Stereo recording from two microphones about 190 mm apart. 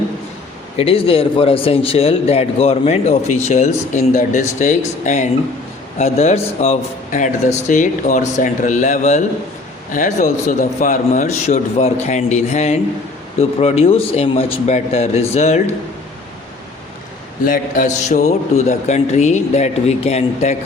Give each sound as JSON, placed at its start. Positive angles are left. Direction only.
{"t": 0.8, "sound": "a man's voice", "side_deg": 30}
{"t": 17.4, "sound": "a man's voice", "side_deg": 50}